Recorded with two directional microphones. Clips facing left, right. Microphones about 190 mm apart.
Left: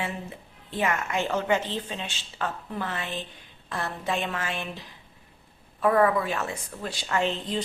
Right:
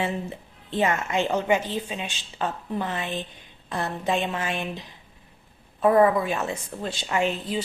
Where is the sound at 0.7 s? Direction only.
25° right (ahead or behind).